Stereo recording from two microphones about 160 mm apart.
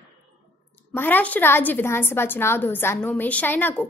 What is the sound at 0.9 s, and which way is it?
A woman's voice, 10° left (ahead or behind).